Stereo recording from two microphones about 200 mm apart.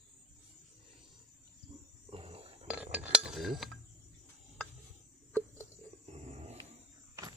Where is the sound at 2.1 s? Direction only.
30° right (ahead or behind).